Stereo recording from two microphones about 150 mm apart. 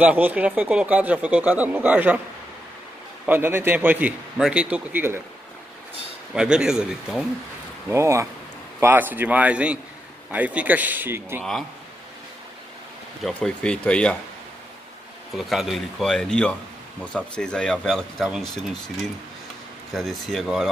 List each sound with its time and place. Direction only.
0.0 s speech: 10° right (ahead or behind)
3.3 s speech: 15° right (ahead or behind)
6.3 s speech: 5° right (ahead or behind)
7.9 s speech: 20° right (ahead or behind)
13.2 s speech: 5° left (ahead or behind)
15.3 s speech: centre (ahead or behind)
19.9 s speech: centre (ahead or behind)